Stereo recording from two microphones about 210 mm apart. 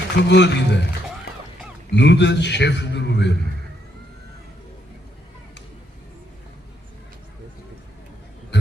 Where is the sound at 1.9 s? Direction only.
55° left (ahead or behind).